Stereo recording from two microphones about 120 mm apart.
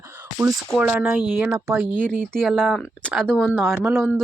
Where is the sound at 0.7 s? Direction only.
15° right (ahead or behind).